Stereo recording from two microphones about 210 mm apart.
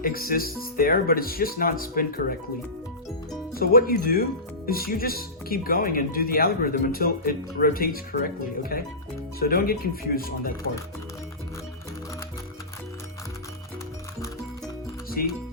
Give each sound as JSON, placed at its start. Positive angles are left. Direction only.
{"t": 0.0, "sound": "speech", "side_deg": 45}
{"t": 3.5, "sound": "speech", "side_deg": 45}
{"t": 15.2, "sound": "speech", "side_deg": 45}